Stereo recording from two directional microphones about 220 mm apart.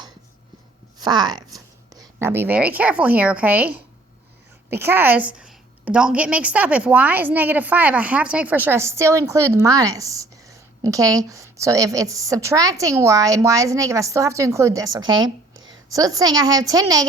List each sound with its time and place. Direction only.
0.9 s a woman's voice: 20° right (ahead or behind)
15.9 s a woman's voice: 15° right (ahead or behind)